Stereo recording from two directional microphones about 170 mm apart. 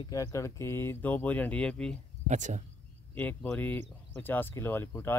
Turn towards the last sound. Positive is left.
turn(degrees=10)  # may be behind; listen again after turning